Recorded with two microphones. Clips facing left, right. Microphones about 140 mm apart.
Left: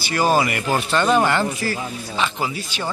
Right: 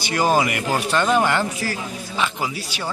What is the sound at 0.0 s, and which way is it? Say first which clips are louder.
Speech: even; 15° right (ahead or behind).